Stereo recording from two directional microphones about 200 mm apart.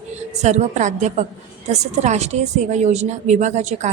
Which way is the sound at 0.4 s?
35° right (ahead or behind).